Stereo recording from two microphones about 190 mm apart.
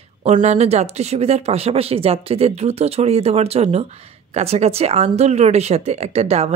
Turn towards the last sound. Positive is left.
turn(degrees=-35)  # may be behind; listen again after turning